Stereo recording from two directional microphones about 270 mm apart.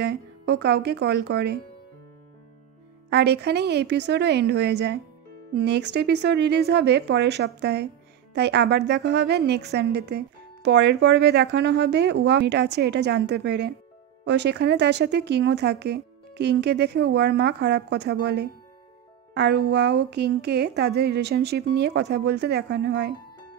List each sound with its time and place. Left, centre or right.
0.0 s a woman's voice: right
3.1 s a woman's voice: right